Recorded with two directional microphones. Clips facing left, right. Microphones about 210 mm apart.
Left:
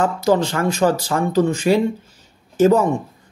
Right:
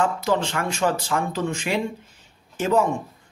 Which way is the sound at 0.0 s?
40° left (ahead or behind).